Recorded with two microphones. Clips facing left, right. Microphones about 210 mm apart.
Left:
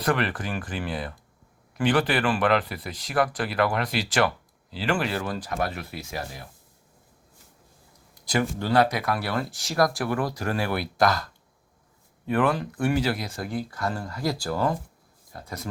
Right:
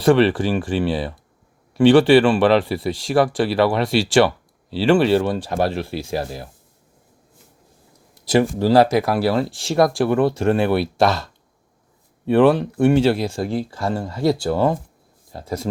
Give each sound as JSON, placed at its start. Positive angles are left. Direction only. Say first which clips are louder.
{"t": 0.2, "sound": "speech", "louder": "right 12 dB", "side_deg": -30}
{"t": 8.3, "sound": "speech", "louder": "right 9 dB", "side_deg": -30}
{"t": 12.3, "sound": "speech", "louder": "right 9 dB", "side_deg": -30}